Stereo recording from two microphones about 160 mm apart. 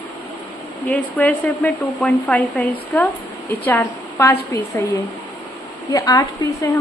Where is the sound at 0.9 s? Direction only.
5° left (ahead or behind).